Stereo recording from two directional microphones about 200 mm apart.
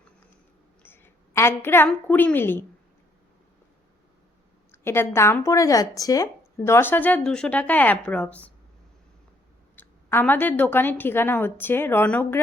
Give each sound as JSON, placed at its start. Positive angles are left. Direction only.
{"t": 0.8, "sound": "a woman's voice", "side_deg": 10}
{"t": 4.7, "sound": "a woman's voice", "side_deg": 10}
{"t": 9.7, "sound": "a woman's voice", "side_deg": 10}